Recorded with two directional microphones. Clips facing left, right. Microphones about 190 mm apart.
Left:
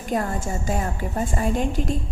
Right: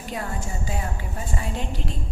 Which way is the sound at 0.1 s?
45° left (ahead or behind).